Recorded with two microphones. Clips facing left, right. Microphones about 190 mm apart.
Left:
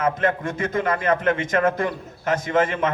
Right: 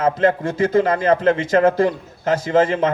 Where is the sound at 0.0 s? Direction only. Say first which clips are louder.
Right 5 dB; 30° right (ahead or behind).